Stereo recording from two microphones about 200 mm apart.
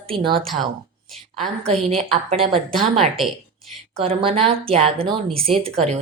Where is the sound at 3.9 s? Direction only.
30° right (ahead or behind).